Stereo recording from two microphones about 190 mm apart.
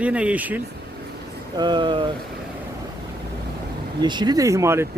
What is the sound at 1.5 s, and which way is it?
Speech, 25° right (ahead or behind).